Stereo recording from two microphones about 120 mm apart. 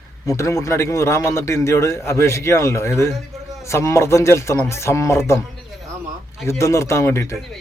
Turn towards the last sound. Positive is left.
turn(degrees=25)  # may be behind; listen again after turning